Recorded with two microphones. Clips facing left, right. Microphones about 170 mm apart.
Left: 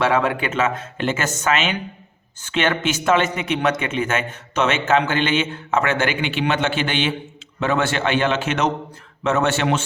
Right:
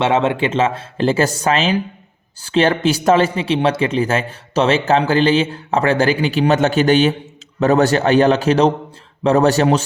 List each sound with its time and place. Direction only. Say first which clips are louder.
0.0 s speech: right 3 dB; 25° right (ahead or behind)